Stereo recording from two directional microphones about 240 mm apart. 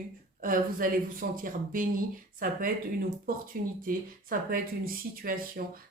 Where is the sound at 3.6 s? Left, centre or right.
Right.